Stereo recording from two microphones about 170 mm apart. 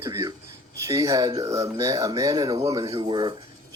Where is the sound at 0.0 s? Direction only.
20° right (ahead or behind).